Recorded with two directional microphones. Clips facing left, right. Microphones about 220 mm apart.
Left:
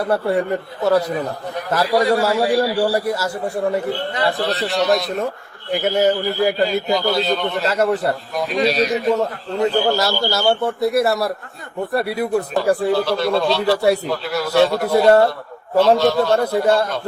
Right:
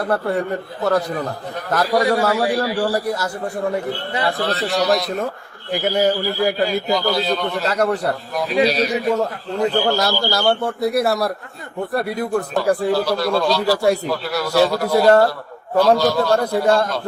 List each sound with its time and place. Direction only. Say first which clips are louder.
0.1 s a man's voice: left 2 dB; 10° left (ahead or behind)
2.2 s a man's voice: left 1 dB; 25° left (ahead or behind)
2.6 s a man's voice: left 2 dB; 10° left (ahead or behind)
4.3 s a man's voice: right 1 dB; centre (ahead or behind)